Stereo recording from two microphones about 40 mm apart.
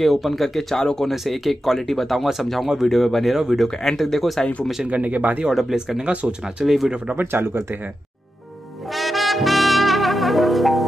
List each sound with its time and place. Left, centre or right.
0.0 s speech: centre
1.1 s speech: centre
3.3 s speech: centre
3.6 s speech: centre
4.8 s speech: right
5.5 s speech: centre
5.8 s speech: centre
7.2 s speech: right
8.9 s brass instrument: centre